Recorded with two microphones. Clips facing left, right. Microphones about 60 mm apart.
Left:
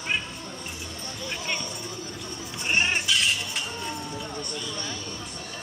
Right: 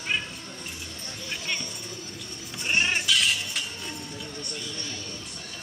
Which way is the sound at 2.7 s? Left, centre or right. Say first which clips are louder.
Left 1 dB; centre.